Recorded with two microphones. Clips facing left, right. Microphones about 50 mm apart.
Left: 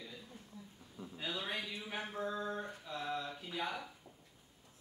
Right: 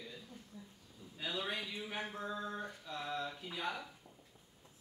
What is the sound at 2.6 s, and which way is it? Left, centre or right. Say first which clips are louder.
Mantra: even; centre.